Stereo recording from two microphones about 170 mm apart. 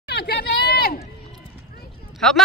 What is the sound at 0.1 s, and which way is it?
Hubbub, 70° left (ahead or behind).